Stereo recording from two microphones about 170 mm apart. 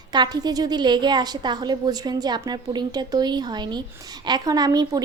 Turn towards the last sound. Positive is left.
turn(degrees=-25)  # may be behind; listen again after turning